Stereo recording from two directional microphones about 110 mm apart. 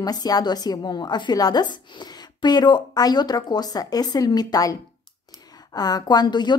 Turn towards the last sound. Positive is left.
turn(degrees=40)  # may be behind; listen again after turning